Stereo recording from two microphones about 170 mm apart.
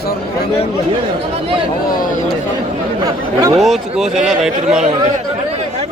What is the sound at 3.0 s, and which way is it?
Speech, 20° right (ahead or behind).